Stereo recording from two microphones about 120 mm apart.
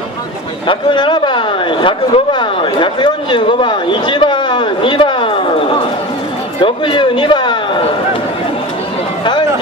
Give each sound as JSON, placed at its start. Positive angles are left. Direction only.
{"t": 0.7, "sound": "speech", "side_deg": 40}